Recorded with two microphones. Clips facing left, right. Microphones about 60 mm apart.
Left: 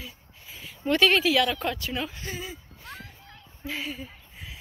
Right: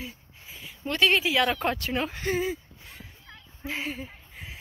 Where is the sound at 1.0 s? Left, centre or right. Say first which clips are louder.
Left 1 dB; centre.